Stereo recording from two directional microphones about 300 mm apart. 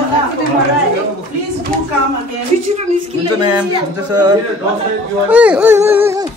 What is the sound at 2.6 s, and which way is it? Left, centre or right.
Speech, right.